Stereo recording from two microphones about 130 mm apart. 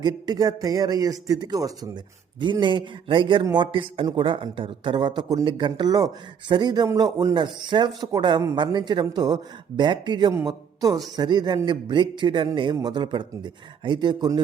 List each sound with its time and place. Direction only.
0.0 s a man's voice: 30° right (ahead or behind)
7.3 s a man's voice: 35° right (ahead or behind)